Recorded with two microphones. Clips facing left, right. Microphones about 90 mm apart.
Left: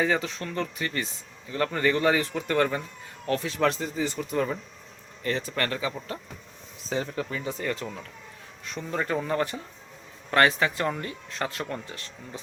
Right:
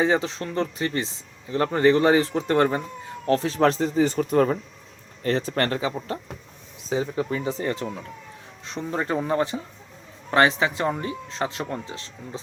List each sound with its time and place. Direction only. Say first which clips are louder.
0.0 s speech: right 4 dB; 25° right (ahead or behind); by 4.5 s 45° right (ahead or behind)
5.2 s speech: right 5 dB; 35° right (ahead or behind)